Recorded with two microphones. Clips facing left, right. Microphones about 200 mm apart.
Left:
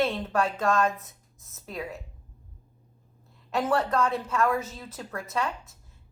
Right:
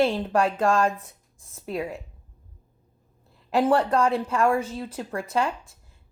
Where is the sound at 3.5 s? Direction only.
30° right (ahead or behind).